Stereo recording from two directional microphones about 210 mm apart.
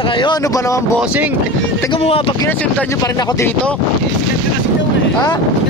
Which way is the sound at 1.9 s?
30° left (ahead or behind).